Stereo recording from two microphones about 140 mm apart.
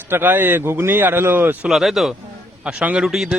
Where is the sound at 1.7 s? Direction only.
Centre (ahead or behind).